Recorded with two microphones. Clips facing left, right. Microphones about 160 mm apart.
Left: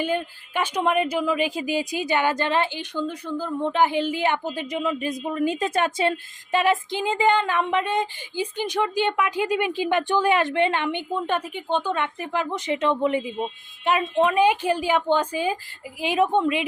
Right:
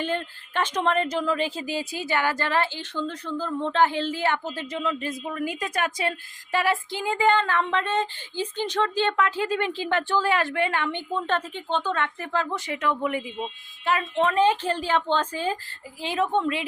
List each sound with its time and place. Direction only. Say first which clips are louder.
0.0 s speech: left 3 dB; 10° left (ahead or behind)